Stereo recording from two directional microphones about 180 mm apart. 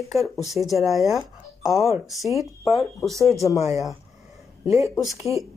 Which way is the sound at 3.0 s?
Centre (ahead or behind).